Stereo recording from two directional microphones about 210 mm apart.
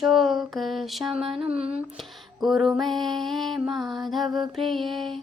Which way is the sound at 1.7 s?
Centre (ahead or behind).